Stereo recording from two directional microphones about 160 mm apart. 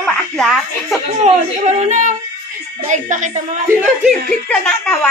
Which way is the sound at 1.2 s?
45° right (ahead or behind).